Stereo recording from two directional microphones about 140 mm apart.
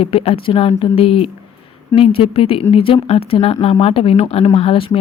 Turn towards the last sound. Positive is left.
turn(degrees=40)  # may be behind; listen again after turning